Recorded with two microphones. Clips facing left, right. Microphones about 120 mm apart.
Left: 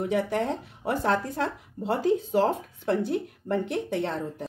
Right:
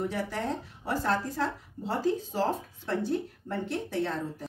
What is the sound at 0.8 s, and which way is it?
Speech, 65° left (ahead or behind).